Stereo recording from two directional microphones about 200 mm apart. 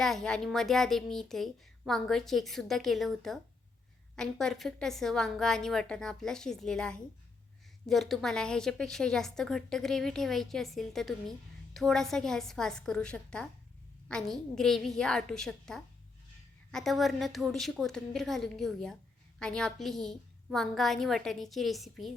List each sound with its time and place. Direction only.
0.0 s a child's voice: centre (ahead or behind)